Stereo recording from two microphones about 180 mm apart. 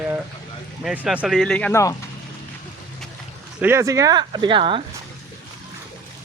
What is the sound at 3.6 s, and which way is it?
Speech, 15° right (ahead or behind).